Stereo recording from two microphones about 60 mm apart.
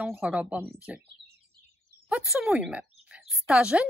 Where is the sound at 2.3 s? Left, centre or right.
Centre.